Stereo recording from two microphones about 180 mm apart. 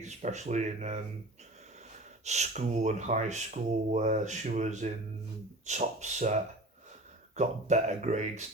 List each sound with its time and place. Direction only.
0.0 s speech: 40° right (ahead or behind)
2.2 s speech: 40° right (ahead or behind)